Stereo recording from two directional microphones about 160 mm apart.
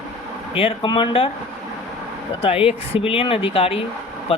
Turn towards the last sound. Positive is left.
turn(degrees=35)  # may be behind; listen again after turning